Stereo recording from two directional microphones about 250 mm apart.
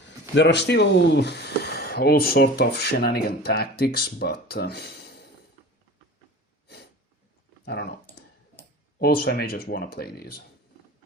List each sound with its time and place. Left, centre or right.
0.3 s speech: left
7.6 s speech: left
9.0 s speech: left